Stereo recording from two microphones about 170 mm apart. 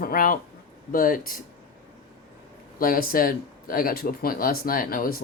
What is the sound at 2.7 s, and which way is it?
Speech, 55° left (ahead or behind).